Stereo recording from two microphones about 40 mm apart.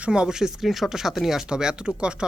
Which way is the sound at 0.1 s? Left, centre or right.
Centre.